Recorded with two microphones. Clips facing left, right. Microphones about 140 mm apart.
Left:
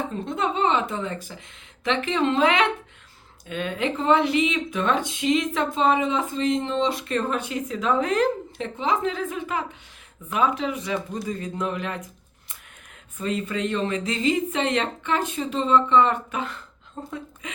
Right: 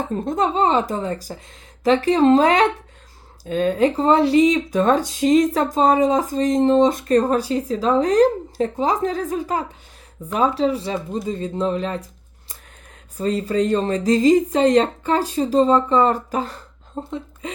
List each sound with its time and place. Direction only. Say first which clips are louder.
0.1 s speech: right 6 dB; 40° right (ahead or behind)
13.1 s speech: right 7 dB; 35° right (ahead or behind)